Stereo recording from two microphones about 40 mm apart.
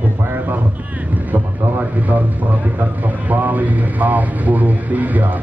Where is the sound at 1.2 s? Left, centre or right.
Right.